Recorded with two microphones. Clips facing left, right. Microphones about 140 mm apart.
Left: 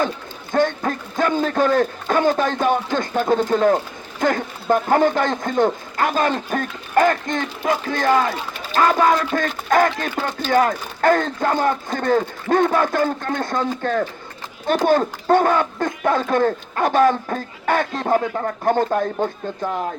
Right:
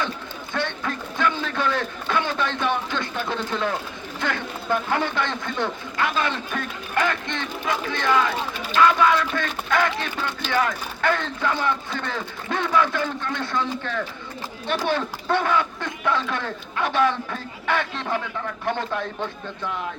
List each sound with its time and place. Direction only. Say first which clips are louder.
0.5 s a man's voice: left 9 dB; 45° left (ahead or behind)